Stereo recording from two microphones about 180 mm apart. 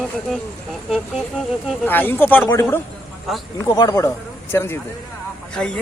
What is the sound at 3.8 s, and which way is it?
Speech, 20° left (ahead or behind).